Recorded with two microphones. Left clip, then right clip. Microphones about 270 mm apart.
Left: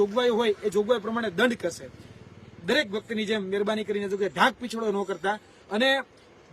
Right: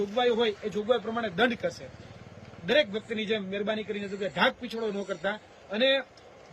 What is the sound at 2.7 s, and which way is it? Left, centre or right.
A man's voice, centre.